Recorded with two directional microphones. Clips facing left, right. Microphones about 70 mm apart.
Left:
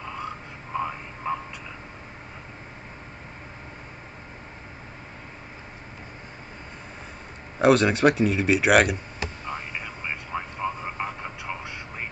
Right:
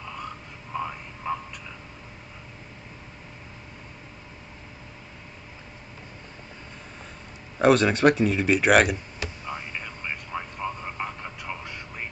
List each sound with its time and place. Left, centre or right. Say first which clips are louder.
0.0 s a sound: left 3 dB; centre
7.5 s speech: even; centre
9.5 s vehicle: left 1 dB; centre